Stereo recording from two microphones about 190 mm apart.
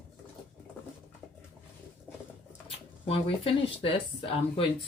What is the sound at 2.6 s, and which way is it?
Speech, 30° left (ahead or behind).